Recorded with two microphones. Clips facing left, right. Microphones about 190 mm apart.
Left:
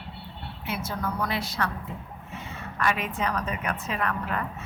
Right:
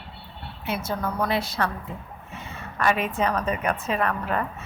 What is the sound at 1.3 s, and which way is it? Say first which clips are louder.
Speech: right 4 dB; 30° right (ahead or behind).